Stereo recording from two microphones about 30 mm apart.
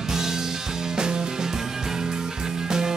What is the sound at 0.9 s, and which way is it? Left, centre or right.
Music, right.